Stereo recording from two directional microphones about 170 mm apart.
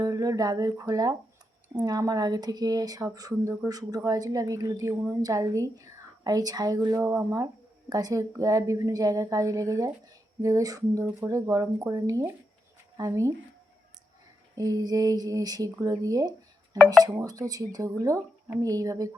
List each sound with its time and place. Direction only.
0.0 s speech: 20° right (ahead or behind)
14.5 s speech: 20° right (ahead or behind)